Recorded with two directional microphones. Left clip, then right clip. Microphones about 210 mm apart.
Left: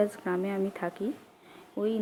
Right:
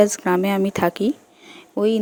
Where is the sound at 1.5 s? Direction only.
45° right (ahead or behind).